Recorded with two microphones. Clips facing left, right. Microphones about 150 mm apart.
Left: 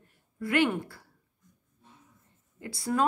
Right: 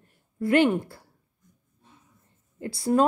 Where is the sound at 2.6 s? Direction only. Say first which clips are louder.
Right 6 dB; 30° right (ahead or behind).